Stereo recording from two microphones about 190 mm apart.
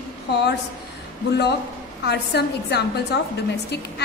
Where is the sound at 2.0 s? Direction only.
60° left (ahead or behind).